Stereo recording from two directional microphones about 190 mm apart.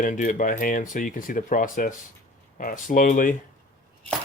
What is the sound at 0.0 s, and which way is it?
Speech, 45° left (ahead or behind).